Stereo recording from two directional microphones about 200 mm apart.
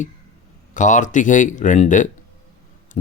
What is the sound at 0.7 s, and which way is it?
Speech, 40° left (ahead or behind).